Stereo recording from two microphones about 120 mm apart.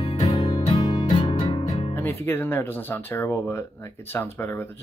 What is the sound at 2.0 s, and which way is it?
Speech, 20° left (ahead or behind).